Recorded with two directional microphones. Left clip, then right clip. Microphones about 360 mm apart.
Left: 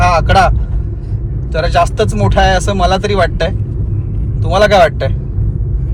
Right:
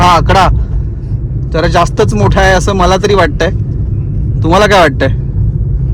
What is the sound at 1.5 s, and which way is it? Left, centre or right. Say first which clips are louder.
Speech: right 3 dB; right.